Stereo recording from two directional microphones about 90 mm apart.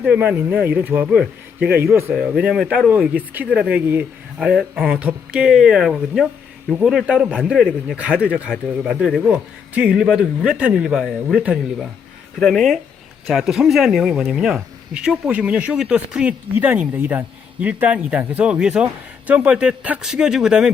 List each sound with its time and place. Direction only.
0.0 s a man's voice: 15° right (ahead or behind)
12.4 s speech: centre (ahead or behind)